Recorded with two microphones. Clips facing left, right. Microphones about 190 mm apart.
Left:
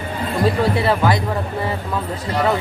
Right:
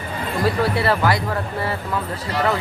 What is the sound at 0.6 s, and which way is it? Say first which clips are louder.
Speech: left 2 dB; 20° left (ahead or behind).